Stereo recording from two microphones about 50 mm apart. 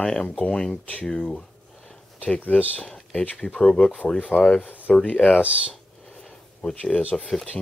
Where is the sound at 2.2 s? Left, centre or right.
Left.